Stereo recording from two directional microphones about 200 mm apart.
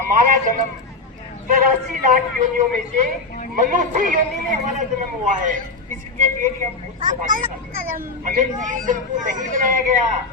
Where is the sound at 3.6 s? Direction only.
45° right (ahead or behind).